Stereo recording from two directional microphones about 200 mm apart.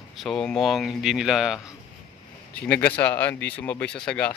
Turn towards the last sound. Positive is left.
turn(degrees=5)  # may be behind; listen again after turning